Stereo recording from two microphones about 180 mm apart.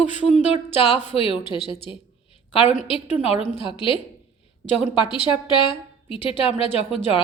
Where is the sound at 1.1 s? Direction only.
30° left (ahead or behind).